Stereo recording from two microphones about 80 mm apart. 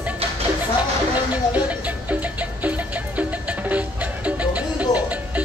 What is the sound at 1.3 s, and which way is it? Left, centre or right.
Music, centre.